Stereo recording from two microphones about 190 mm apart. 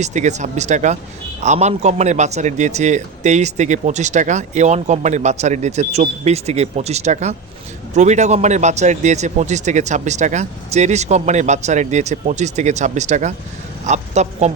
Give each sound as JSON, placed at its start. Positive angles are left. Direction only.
{"t": 0.0, "sound": "a man's voice", "side_deg": -40}